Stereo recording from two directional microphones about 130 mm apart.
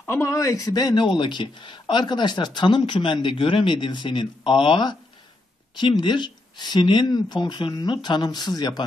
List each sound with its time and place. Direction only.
0.0 s a man's voice: 20° left (ahead or behind)